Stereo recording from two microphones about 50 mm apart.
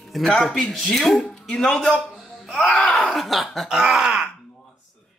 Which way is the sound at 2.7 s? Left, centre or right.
Centre.